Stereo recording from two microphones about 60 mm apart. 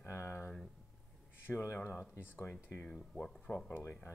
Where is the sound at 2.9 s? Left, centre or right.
Centre.